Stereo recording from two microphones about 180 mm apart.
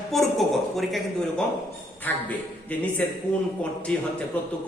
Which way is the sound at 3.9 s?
5° left (ahead or behind).